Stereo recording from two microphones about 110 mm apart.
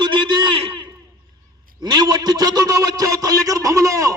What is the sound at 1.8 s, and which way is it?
A man's voice, 40° right (ahead or behind).